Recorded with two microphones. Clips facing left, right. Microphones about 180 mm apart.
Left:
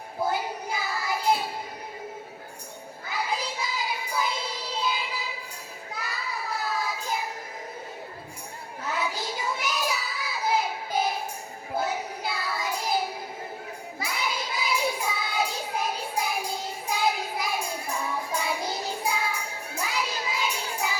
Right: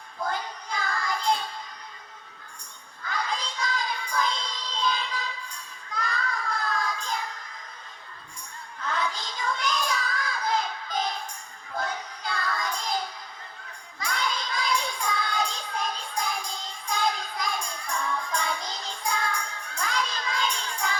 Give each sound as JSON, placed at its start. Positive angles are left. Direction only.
{"t": 0.3, "sound": "child singing", "side_deg": 5}
{"t": 3.1, "sound": "a sound", "side_deg": 5}
{"t": 4.8, "sound": "child singing", "side_deg": 5}
{"t": 8.9, "sound": "child singing", "side_deg": 5}
{"t": 16.9, "sound": "music", "side_deg": 5}